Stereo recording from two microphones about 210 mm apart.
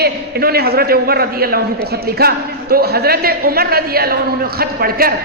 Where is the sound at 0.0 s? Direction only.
50° right (ahead or behind).